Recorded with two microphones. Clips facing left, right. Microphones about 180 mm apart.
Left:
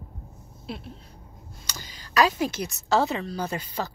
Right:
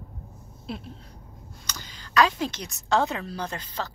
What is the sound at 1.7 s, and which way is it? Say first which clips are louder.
A woman's voice: right 1 dB; 10° left (ahead or behind).